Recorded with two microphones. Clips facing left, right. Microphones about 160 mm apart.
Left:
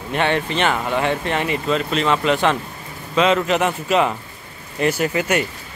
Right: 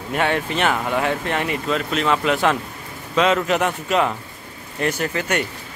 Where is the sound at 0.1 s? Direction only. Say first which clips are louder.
Left 1 dB; 5° right (ahead or behind).